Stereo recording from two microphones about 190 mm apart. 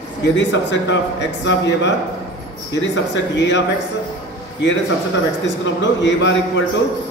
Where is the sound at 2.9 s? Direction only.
70° left (ahead or behind).